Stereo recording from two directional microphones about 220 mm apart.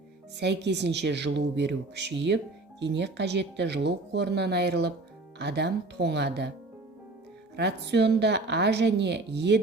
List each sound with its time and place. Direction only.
0.3 s speech: 50° right (ahead or behind)
7.5 s speech: 50° right (ahead or behind)